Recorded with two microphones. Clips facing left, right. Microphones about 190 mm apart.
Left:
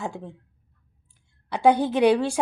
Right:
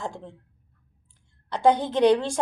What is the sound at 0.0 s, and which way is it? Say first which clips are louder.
Speech: left 2 dB; 10° left (ahead or behind).